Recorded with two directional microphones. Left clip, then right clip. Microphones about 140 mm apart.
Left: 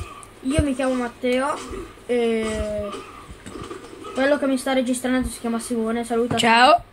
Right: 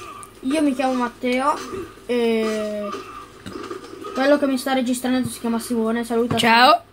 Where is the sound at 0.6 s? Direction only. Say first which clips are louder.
Right 2 dB; 50° right (ahead or behind).